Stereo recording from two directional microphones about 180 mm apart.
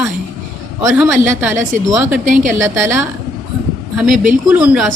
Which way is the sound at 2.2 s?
45° right (ahead or behind).